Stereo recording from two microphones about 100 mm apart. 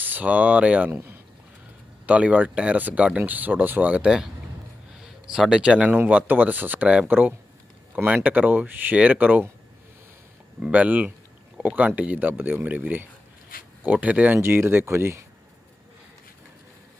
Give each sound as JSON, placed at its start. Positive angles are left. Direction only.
{"t": 0.0, "sound": "speech", "side_deg": -15}
{"t": 0.9, "sound": "speech", "side_deg": -25}
{"t": 2.0, "sound": "speech", "side_deg": -15}
{"t": 10.6, "sound": "speech", "side_deg": -15}